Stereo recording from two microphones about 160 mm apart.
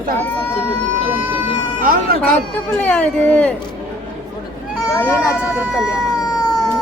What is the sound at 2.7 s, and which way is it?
Speech, 10° left (ahead or behind).